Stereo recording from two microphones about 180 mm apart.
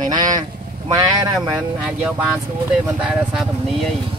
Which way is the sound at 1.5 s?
10° right (ahead or behind).